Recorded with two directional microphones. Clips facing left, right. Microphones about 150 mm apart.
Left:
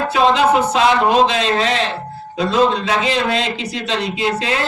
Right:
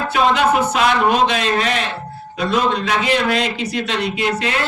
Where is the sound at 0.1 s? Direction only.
30° left (ahead or behind).